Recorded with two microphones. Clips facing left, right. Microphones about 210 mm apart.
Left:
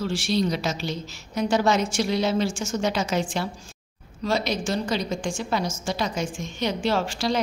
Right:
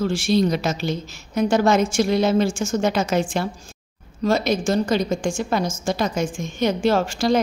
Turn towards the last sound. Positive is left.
turn(degrees=-45)  # may be behind; listen again after turning